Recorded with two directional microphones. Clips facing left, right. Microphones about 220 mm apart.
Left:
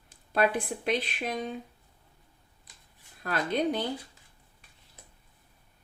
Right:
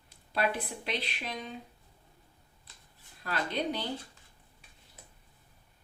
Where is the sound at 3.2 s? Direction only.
50° left (ahead or behind).